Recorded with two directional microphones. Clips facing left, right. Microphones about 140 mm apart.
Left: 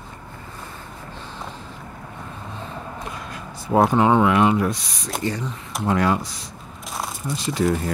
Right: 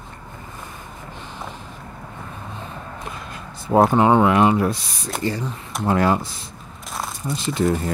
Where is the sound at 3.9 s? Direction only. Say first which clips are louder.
Right 1 dB; 25° right (ahead or behind).